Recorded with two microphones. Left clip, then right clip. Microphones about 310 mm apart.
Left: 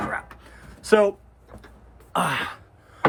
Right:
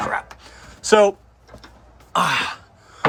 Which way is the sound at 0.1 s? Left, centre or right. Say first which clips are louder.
Right 5 dB; centre.